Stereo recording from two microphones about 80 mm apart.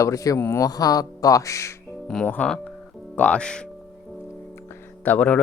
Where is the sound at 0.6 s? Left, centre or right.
Left.